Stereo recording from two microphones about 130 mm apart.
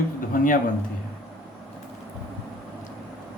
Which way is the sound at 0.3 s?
90° left.